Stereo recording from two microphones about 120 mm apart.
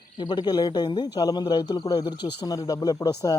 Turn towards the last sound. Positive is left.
turn(degrees=30)  # may be behind; listen again after turning